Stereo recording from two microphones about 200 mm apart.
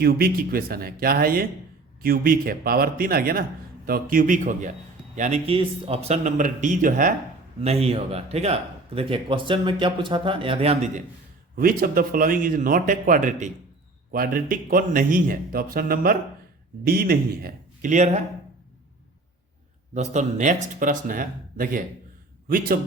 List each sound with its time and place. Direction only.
0.0 s a man's voice: 50° right (ahead or behind)
7.6 s a man's voice: 30° right (ahead or behind)
11.5 s speech: 45° right (ahead or behind)
19.9 s a man's voice: 35° right (ahead or behind)